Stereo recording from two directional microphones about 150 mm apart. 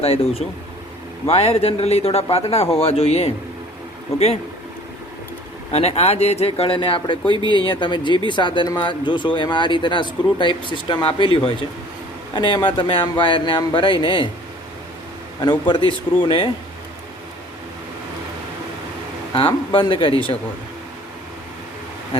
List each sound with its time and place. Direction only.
0.0 s speech: 40° left (ahead or behind)
5.7 s speech: 45° left (ahead or behind)
15.4 s speech: 30° left (ahead or behind)
19.3 s speech: 35° left (ahead or behind)